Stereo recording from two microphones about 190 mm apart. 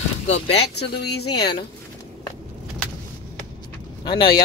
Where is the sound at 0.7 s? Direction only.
60° left (ahead or behind).